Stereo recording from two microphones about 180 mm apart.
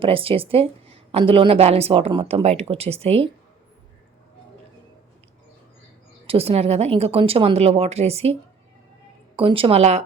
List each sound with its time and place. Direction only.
0.0 s a woman's voice: 30° right (ahead or behind)
6.2 s a woman's voice: 35° right (ahead or behind)